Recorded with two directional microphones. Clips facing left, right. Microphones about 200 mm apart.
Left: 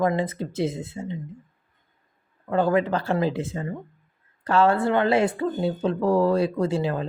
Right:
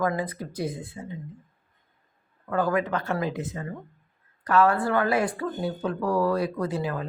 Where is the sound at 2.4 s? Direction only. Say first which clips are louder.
Left 4 dB; 25° left (ahead or behind).